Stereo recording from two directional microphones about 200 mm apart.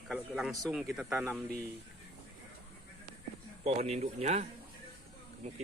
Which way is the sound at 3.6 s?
30° right (ahead or behind).